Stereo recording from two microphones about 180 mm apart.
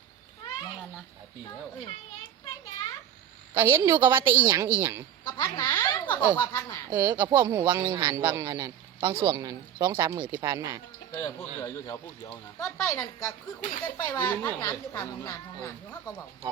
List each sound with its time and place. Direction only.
3.5 s speech: 15° right (ahead or behind)
5.4 s speech: 20° left (ahead or behind)
6.9 s speech: 10° right (ahead or behind)
11.1 s speech: 10° left (ahead or behind)